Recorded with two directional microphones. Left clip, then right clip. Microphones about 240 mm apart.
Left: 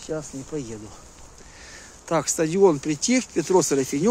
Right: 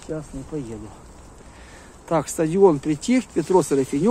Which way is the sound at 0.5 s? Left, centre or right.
Left.